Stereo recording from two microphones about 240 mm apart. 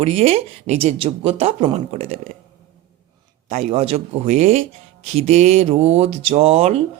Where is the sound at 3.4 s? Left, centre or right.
Right.